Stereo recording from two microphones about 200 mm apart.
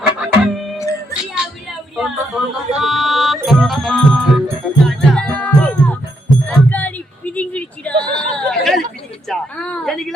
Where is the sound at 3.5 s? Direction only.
Centre (ahead or behind).